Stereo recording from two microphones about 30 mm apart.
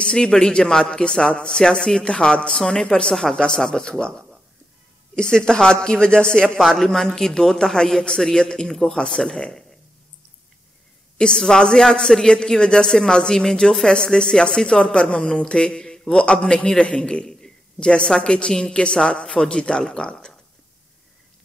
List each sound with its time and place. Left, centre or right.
0.0 s speech: left
1.6 s speech: centre
2.0 s a man's voice: left
2.5 s speech: centre
2.8 s speech: left
5.1 s speech: left
6.8 s speech: centre
11.1 s a man's voice: left